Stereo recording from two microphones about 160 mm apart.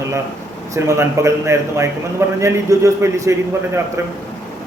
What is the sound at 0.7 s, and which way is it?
Speech, 20° right (ahead or behind).